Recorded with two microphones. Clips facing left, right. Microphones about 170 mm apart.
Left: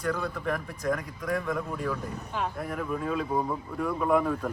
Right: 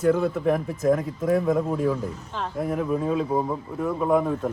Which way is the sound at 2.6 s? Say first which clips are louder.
Right 7 dB; 5° right (ahead or behind).